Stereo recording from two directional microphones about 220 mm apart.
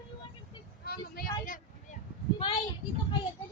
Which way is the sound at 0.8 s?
45° left (ahead or behind).